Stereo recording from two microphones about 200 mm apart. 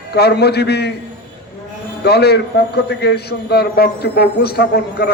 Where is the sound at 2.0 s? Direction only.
55° left (ahead or behind).